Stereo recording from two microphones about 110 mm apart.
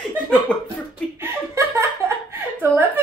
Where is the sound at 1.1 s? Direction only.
25° right (ahead or behind).